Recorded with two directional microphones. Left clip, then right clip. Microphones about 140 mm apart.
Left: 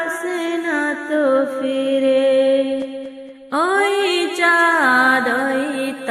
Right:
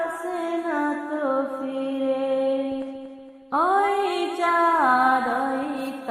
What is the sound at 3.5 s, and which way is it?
Music, 15° left (ahead or behind).